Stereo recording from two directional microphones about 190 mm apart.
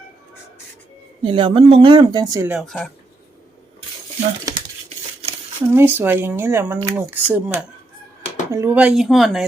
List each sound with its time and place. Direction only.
1.2 s speech: 25° right (ahead or behind)
2.6 s speech: centre (ahead or behind)
5.5 s speech: 10° right (ahead or behind)